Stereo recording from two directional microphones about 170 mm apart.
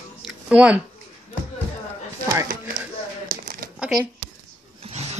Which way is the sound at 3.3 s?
60° right (ahead or behind).